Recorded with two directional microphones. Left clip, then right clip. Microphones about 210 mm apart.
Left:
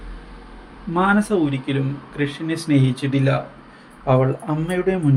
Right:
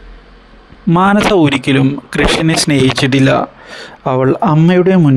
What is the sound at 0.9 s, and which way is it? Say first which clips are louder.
Speech: right 9 dB; 55° right (ahead or behind).